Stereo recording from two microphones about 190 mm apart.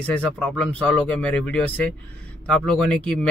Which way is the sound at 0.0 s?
5° left (ahead or behind).